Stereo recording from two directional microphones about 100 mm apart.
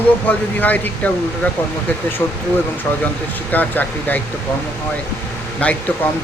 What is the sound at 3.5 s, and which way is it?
Speech, 15° left (ahead or behind).